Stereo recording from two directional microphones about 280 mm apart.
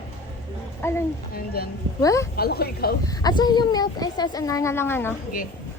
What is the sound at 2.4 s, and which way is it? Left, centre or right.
Speech, left.